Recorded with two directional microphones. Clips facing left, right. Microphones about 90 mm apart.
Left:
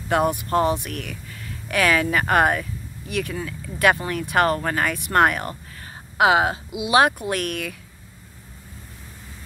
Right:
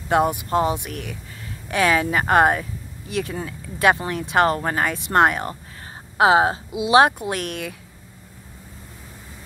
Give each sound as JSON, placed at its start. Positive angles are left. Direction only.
{"t": 0.1, "sound": "speech", "side_deg": -20}